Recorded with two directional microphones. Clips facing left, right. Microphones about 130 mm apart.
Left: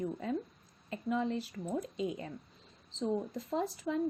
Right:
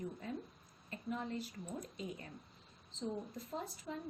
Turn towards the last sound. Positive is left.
turn(degrees=90)